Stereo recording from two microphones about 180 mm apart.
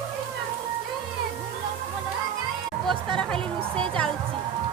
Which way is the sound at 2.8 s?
5° left (ahead or behind).